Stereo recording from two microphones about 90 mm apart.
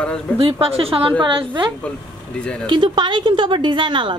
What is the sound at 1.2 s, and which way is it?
A woman's voice, 65° right (ahead or behind).